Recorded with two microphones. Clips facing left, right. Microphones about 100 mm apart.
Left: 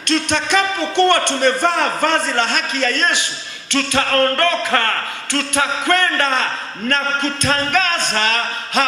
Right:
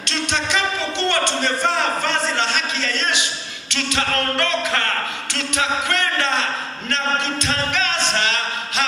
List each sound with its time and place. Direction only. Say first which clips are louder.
0.1 s a man's voice: left 5 dB; 50° left (ahead or behind)